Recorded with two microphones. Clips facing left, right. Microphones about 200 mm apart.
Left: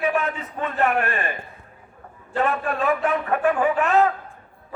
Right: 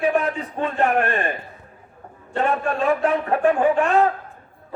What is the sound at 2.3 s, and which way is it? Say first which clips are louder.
A man's voice: right 1 dB; 30° right (ahead or behind).